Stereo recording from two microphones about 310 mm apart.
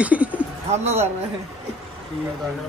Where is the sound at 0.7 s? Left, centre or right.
Right.